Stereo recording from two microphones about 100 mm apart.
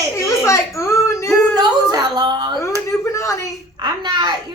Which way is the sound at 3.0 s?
30° left (ahead or behind).